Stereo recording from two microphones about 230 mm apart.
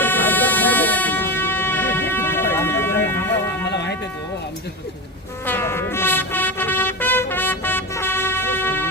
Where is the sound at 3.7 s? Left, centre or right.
Left.